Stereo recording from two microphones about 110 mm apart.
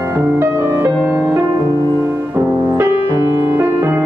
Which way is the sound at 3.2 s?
45° left (ahead or behind).